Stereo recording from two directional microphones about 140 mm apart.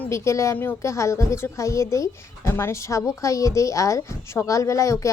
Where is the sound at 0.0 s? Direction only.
20° left (ahead or behind).